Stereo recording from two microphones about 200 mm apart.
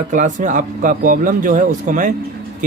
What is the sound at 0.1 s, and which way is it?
Speech, 40° right (ahead or behind).